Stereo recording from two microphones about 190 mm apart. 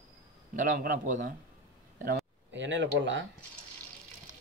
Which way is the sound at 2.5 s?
70° right (ahead or behind).